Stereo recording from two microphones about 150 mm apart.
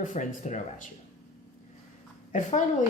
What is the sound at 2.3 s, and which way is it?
Speech, 55° left (ahead or behind).